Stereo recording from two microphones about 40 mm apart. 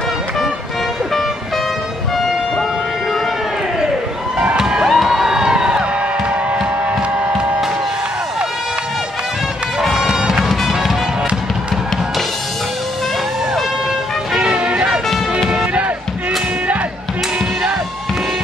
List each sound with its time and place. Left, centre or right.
2.1 s vehicle: centre
4.6 s music: centre
6.6 s a sound: right
9.9 s music: centre
14.3 s music: right